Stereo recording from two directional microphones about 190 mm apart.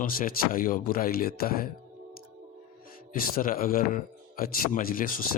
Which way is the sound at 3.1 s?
50° left (ahead or behind).